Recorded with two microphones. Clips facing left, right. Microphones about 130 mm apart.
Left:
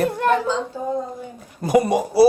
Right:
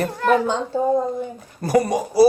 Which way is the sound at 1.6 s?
20° left (ahead or behind).